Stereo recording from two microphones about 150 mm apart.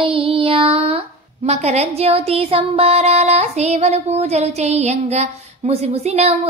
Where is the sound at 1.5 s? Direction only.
45° right (ahead or behind).